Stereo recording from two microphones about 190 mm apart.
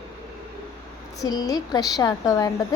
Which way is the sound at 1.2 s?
20° left (ahead or behind).